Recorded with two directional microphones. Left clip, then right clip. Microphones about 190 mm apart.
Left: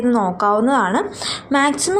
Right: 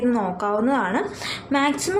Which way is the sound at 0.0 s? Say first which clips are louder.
Left 6 dB; 25° left (ahead or behind).